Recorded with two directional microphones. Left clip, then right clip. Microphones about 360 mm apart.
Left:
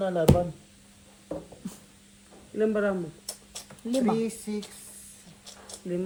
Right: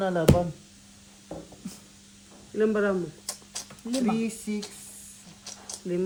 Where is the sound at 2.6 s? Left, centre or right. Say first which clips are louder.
Right 1 dB; centre.